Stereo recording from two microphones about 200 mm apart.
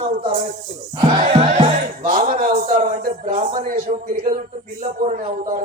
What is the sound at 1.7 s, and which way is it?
Music, 40° right (ahead or behind).